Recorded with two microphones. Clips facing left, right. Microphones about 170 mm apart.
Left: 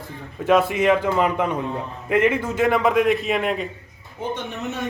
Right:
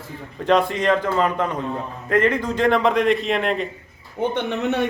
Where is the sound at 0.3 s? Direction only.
5° left (ahead or behind).